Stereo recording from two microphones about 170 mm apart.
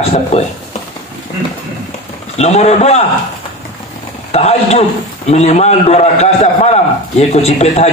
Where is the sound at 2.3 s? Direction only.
40° left (ahead or behind).